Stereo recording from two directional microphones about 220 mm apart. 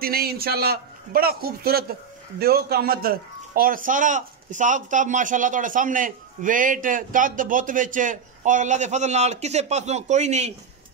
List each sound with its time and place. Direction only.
0.0 s a man's voice: 45° right (ahead or behind)